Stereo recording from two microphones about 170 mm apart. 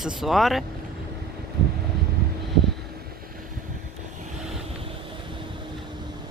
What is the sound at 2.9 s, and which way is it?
Vehicle, 60° right (ahead or behind).